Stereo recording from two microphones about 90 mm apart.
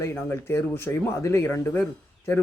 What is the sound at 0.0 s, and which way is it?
Speech, 25° left (ahead or behind).